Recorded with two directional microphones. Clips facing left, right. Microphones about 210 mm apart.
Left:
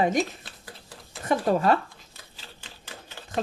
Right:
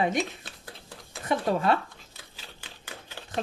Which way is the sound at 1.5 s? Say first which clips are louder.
Left 3 dB; 45° left (ahead or behind).